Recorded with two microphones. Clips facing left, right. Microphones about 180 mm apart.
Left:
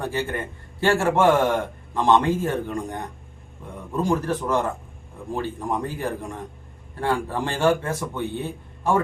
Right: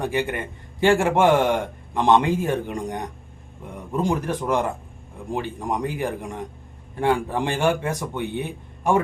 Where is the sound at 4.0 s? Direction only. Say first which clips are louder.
Left 1 dB; 15° right (ahead or behind).